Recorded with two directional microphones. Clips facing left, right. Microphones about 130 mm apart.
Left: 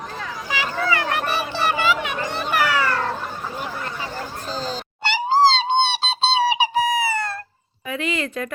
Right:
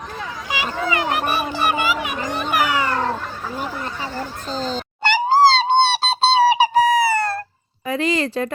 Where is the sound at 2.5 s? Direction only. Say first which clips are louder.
Right 1 dB; 15° right (ahead or behind).